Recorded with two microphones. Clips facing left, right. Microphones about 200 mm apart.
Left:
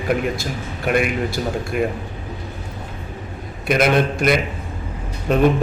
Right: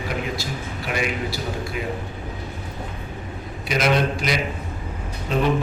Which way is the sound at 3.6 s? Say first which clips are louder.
Left 4 dB; 55° left (ahead or behind).